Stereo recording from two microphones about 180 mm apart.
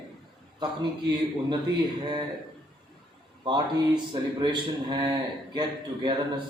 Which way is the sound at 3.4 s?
25° right (ahead or behind).